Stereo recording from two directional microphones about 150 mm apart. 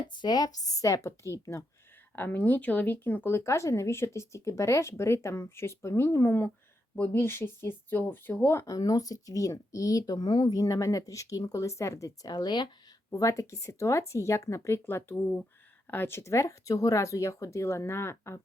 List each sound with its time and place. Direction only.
0.2 s speech: 25° left (ahead or behind)